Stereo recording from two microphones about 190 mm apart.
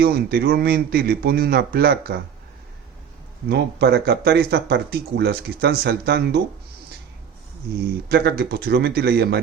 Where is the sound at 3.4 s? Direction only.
60° right (ahead or behind).